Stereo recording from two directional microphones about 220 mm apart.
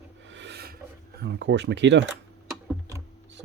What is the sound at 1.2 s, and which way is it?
Speech, 50° right (ahead or behind).